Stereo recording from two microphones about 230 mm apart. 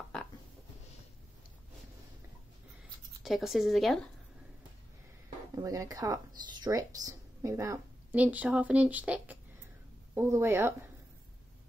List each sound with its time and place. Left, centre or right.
3.3 s a woman's voice: centre
5.6 s a woman's voice: centre